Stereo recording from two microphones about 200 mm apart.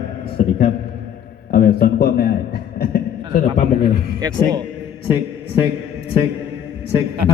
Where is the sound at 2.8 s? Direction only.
45° left (ahead or behind).